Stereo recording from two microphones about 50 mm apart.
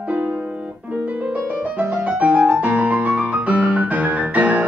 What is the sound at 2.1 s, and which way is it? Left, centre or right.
Music, right.